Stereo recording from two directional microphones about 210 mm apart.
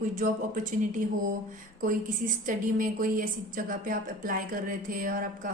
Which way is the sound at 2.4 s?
40° right (ahead or behind).